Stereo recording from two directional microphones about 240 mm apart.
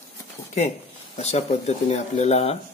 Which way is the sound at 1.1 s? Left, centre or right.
Left.